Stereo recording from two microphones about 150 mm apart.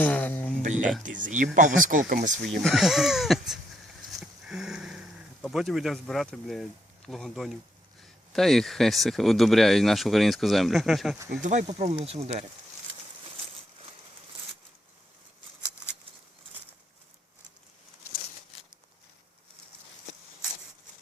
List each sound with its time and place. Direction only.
0.0 s a sound: 10° left (ahead or behind)
0.6 s music: 55° right (ahead or behind)
1.0 s speech: 60° right (ahead or behind)
2.5 s speech: centre (ahead or behind)
4.1 s a sound: centre (ahead or behind)
8.0 s speech: centre (ahead or behind)
11.3 s speech: 55° right (ahead or behind)